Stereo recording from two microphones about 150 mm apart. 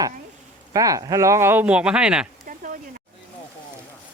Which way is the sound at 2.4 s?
65° right (ahead or behind).